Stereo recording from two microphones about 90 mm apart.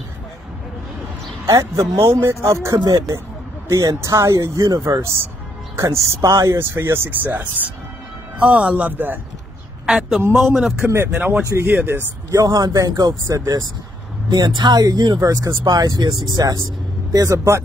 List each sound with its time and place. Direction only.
1.6 s speech: 30° right (ahead or behind)
2.8 s speech: 45° right (ahead or behind)
3.6 s speech: 35° right (ahead or behind)
9.8 s a man's voice: 5° right (ahead or behind); by 12.1 s 25° right (ahead or behind)
12.4 s speech: 45° right (ahead or behind)
14.3 s speech: 55° right (ahead or behind); by 17.6 s 35° right (ahead or behind)